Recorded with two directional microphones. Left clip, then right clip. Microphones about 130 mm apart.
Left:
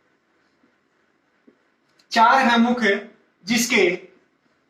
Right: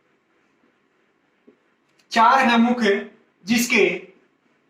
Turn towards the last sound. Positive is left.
turn(degrees=25)  # may be behind; listen again after turning